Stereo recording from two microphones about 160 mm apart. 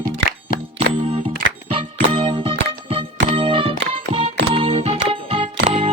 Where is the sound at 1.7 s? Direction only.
35° right (ahead or behind).